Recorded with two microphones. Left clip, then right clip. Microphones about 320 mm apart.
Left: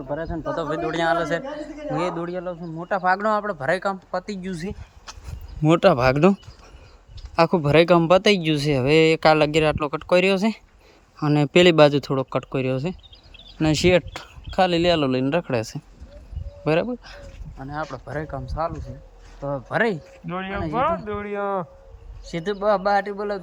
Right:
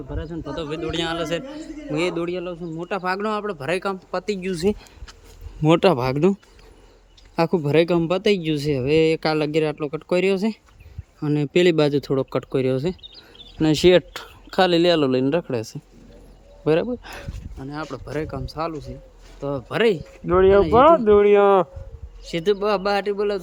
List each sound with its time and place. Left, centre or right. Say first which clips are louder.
0.1 s a man's voice: left 6 dB; centre
5.6 s a man's voice: left 1 dB; centre
20.2 s speech: right 14 dB; centre
22.3 s a man's voice: right 1 dB; centre